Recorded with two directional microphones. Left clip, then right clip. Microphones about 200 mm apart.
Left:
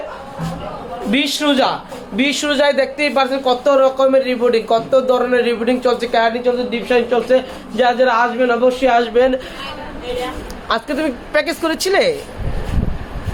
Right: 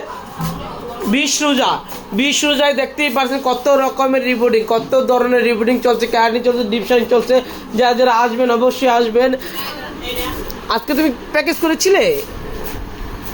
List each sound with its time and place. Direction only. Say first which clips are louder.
1.1 s a woman's voice: even; 10° right (ahead or behind)
3.2 s a man's voice: left 2 dB; 25° right (ahead or behind)
10.7 s a woman's voice: right 2 dB; 15° right (ahead or behind)